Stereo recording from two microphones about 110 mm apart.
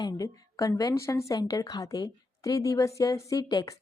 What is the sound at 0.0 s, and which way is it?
A woman's voice, 30° left (ahead or behind).